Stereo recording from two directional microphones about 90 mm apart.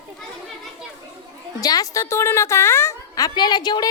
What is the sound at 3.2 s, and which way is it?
Speech, 55° left (ahead or behind).